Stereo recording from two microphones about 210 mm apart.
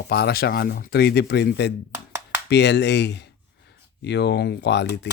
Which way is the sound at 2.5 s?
55° left (ahead or behind).